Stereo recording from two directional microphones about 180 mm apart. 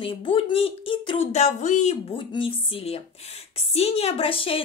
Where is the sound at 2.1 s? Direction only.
30° left (ahead or behind).